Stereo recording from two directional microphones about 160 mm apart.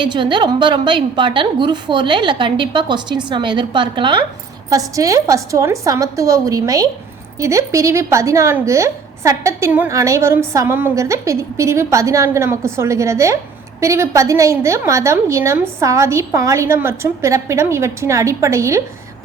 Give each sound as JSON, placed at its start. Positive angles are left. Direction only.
{"t": 0.0, "sound": "a woman's voice", "side_deg": -30}